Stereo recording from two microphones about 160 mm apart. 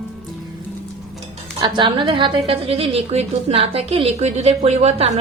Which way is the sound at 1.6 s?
30° right (ahead or behind).